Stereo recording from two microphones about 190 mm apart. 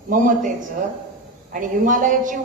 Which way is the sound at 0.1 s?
45° right (ahead or behind).